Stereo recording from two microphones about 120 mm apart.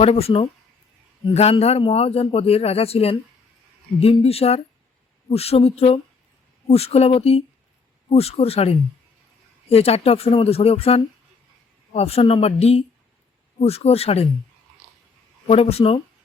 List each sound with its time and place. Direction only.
0.0 s a man's voice: 55° left (ahead or behind)
15.4 s a man's voice: 55° left (ahead or behind)